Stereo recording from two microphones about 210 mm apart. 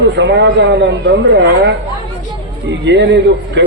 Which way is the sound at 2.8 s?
55° right (ahead or behind).